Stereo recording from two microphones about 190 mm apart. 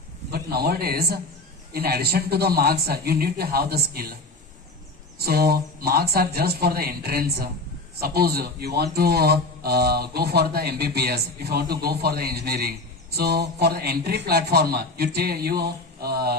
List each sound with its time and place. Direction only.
0.3 s a man's voice: 55° right (ahead or behind)
5.2 s speech: 55° right (ahead or behind)